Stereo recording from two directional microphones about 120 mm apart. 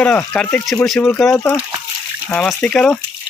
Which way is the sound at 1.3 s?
25° left (ahead or behind).